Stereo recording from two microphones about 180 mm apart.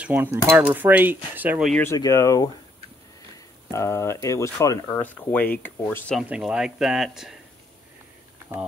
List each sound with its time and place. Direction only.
0.0 s speech: 10° right (ahead or behind)
0.5 s cutlery: 10° right (ahead or behind)
1.7 s speech: 10° left (ahead or behind)
3.7 s speech: 15° left (ahead or behind)
6.2 s speech: 5° right (ahead or behind)